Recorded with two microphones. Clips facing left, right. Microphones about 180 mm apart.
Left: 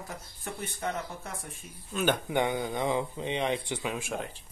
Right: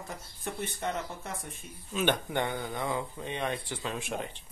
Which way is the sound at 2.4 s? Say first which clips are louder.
Left 4 dB; 15° left (ahead or behind).